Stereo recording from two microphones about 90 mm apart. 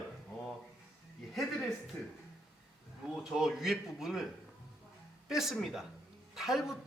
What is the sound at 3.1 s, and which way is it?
Speech, 5° right (ahead or behind).